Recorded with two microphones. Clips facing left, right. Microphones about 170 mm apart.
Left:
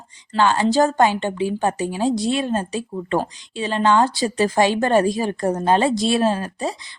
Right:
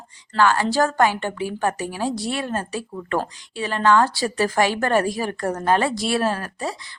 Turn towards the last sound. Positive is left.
turn(degrees=20)  # may be behind; listen again after turning